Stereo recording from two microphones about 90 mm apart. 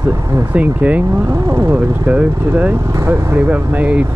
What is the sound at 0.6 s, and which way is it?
Speech, 15° right (ahead or behind).